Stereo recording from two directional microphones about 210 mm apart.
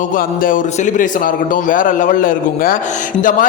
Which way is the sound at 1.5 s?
40° left (ahead or behind).